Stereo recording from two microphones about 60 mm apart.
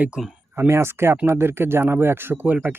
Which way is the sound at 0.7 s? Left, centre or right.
Right.